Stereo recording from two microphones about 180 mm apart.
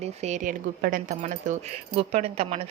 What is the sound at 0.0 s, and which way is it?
Speech, 40° right (ahead or behind).